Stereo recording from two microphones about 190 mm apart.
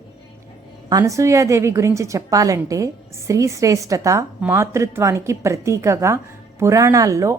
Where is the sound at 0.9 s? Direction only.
20° right (ahead or behind).